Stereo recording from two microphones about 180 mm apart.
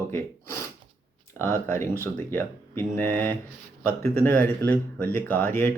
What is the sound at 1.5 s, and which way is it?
Speech, 15° left (ahead or behind).